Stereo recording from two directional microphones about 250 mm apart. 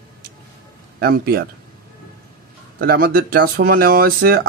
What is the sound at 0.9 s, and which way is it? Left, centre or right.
Speech, right.